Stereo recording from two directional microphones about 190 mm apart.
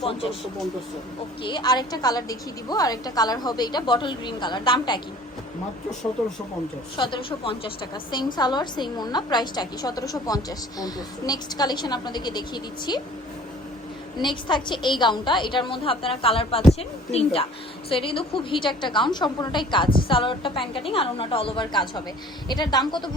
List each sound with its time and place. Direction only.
0.0 s a woman's voice: 30° left (ahead or behind)
1.5 s a woman's voice: 20° left (ahead or behind)
6.9 s a woman's voice: 25° left (ahead or behind)
14.2 s a woman's voice: 25° left (ahead or behind)